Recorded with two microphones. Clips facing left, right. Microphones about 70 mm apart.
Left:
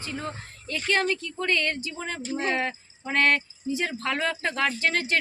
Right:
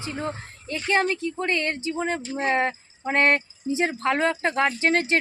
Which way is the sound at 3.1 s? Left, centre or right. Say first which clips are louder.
Right 2 dB; right.